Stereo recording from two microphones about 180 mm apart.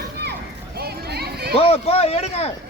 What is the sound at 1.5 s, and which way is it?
Speech, 35° left (ahead or behind).